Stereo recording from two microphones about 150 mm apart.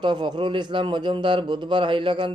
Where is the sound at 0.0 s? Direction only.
30° right (ahead or behind).